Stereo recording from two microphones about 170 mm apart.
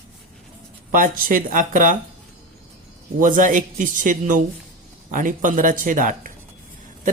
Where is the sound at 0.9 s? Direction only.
55° right (ahead or behind).